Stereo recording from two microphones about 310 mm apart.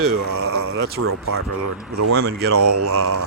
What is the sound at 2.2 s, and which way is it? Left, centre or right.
Speech, right.